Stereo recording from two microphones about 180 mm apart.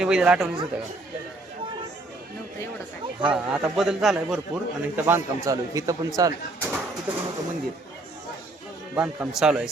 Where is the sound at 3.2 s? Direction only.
5° right (ahead or behind); by 6.7 s 20° right (ahead or behind).